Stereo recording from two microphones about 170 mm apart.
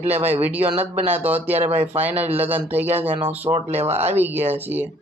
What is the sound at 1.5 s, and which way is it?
Speech, 40° right (ahead or behind).